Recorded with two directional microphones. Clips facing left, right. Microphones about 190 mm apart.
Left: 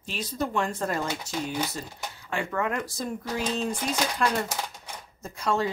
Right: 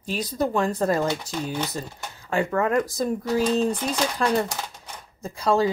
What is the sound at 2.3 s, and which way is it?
Speech, 40° right (ahead or behind).